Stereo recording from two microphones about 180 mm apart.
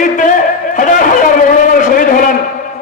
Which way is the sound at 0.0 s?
45° left (ahead or behind).